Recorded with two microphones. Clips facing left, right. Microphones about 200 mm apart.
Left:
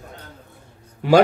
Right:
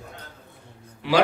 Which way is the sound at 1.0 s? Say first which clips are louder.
Left 8 dB; 45° left (ahead or behind).